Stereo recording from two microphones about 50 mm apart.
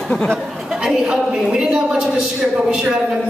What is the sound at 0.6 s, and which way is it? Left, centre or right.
A woman's voice, centre.